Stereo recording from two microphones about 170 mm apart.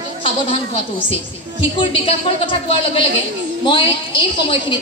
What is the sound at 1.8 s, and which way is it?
A man's voice, 30° left (ahead or behind).